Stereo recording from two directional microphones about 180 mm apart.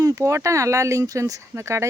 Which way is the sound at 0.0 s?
20° right (ahead or behind).